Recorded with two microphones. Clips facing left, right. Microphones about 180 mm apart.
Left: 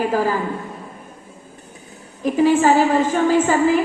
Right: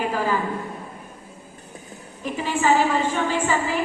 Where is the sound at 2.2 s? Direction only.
45° left (ahead or behind).